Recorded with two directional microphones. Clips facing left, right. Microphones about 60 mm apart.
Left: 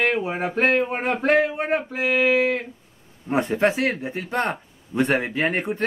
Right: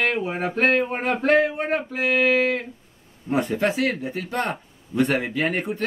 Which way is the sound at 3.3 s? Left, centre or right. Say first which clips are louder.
Left 2 dB; left.